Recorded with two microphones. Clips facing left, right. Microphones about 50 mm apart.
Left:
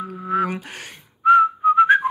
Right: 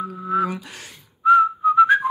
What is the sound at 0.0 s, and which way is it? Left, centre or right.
Whistling, left.